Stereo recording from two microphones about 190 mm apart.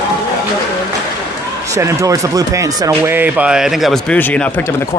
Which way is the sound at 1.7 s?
15° right (ahead or behind).